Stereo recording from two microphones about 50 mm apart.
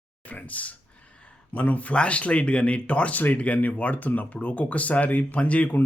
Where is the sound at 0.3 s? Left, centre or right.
Left.